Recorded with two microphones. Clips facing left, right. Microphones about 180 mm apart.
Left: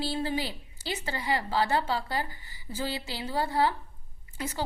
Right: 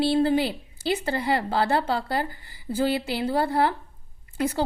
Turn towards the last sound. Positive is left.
turn(degrees=-55)  # may be behind; listen again after turning